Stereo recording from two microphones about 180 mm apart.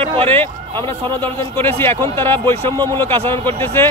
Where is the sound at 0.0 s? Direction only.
30° right (ahead or behind).